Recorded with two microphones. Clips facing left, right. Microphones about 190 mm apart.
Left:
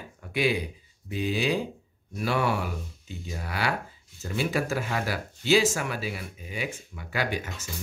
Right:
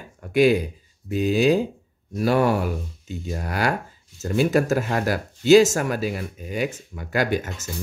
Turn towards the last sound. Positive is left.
turn(degrees=-45)  # may be behind; listen again after turning